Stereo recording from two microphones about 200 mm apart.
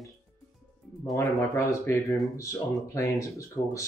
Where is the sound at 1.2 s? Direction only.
15° left (ahead or behind).